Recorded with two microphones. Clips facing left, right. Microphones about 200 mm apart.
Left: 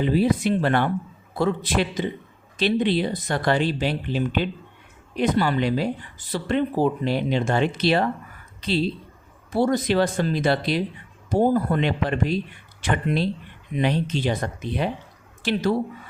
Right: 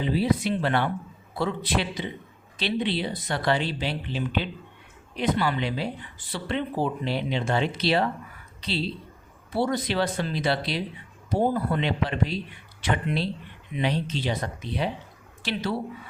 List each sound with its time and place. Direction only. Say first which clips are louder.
0.0 s speech: left 4 dB; 50° left (ahead or behind)